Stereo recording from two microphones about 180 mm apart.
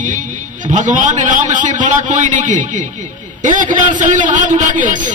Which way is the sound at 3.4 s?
45° right (ahead or behind).